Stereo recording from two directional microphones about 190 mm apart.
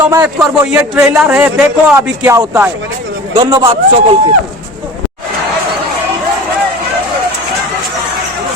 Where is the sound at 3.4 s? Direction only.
25° right (ahead or behind).